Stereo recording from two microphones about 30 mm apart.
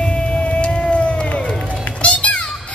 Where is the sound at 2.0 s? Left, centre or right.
Left.